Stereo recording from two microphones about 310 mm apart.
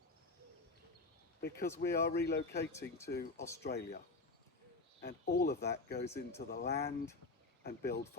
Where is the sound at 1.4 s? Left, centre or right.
Left.